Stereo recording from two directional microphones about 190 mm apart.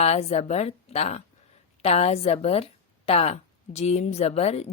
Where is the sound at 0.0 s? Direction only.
35° left (ahead or behind).